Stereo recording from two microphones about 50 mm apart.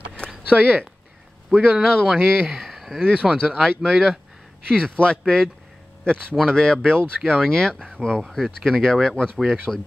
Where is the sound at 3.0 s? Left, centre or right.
Right.